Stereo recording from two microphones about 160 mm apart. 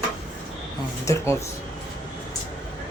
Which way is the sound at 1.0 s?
15° left (ahead or behind).